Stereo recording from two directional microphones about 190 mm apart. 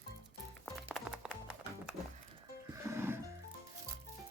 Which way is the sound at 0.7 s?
Centre (ahead or behind).